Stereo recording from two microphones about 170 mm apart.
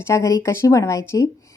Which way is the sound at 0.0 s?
15° left (ahead or behind).